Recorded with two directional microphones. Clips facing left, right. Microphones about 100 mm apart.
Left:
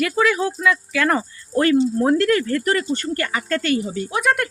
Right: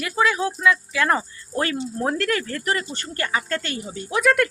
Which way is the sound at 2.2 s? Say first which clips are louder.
Left 6 dB; 35° left (ahead or behind).